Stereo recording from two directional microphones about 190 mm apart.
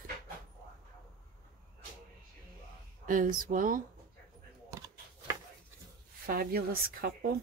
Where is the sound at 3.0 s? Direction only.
45° right (ahead or behind).